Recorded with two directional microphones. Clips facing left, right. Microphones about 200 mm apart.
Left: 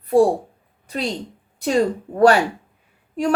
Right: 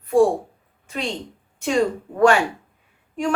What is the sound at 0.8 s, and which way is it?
A woman's voice, 40° left (ahead or behind).